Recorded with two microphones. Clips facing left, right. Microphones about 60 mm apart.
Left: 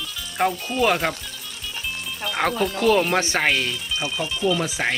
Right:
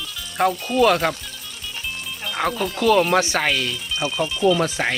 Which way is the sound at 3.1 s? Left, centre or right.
Left.